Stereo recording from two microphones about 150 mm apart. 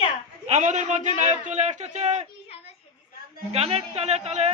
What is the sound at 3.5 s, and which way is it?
A man's voice, 45° right (ahead or behind).